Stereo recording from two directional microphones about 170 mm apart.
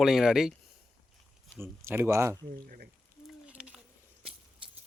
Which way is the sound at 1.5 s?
15° right (ahead or behind).